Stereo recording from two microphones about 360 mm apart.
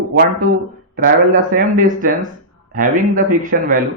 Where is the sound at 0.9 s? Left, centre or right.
Right.